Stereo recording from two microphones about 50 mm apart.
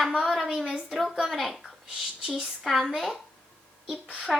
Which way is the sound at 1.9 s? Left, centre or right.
Centre.